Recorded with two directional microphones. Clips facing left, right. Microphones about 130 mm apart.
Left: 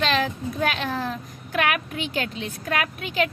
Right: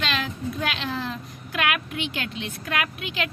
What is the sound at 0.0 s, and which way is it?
A child's voice, 40° left (ahead or behind).